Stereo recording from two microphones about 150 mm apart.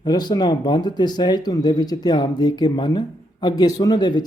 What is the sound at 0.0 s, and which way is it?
Speech, 30° left (ahead or behind).